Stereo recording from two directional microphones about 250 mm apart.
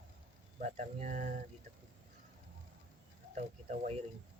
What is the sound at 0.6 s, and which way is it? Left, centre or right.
Speech, right.